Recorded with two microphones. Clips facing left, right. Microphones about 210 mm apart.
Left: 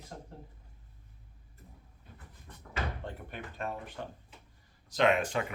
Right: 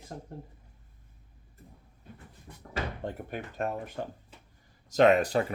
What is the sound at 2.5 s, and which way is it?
Slam, 10° right (ahead or behind).